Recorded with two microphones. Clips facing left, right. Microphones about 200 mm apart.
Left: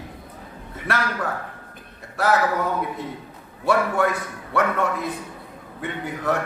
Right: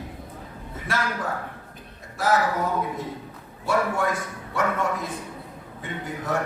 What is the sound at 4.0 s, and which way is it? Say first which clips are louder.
Speech: left 4 dB; 60° left (ahead or behind).